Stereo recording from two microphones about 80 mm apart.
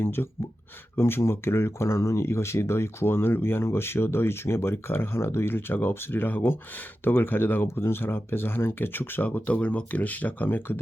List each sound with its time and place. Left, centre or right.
0.0 s speech: left